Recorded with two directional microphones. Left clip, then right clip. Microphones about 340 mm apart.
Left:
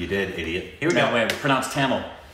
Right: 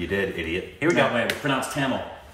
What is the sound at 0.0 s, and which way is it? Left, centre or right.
Speech, centre.